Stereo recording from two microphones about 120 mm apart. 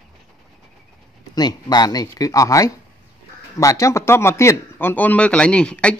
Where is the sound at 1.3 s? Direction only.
35° left (ahead or behind).